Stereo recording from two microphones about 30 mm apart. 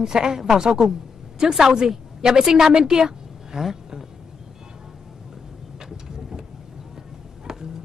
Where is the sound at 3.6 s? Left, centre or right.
Centre.